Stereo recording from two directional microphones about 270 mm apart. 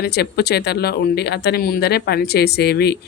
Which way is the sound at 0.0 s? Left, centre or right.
Left.